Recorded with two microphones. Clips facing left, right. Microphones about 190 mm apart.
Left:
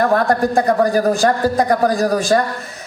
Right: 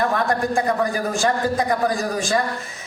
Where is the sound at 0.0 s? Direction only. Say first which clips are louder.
Left 6 dB; 35° left (ahead or behind).